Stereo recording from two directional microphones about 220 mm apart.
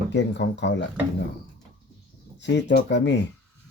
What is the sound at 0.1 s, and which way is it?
Speech, 55° left (ahead or behind).